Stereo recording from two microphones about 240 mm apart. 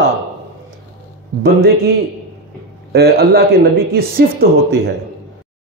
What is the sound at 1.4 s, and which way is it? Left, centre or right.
A man's voice, right.